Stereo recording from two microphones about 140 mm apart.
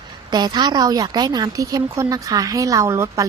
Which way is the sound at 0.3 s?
30° right (ahead or behind).